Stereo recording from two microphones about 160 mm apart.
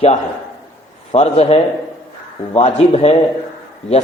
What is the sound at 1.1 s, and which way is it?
A man's voice, 40° left (ahead or behind).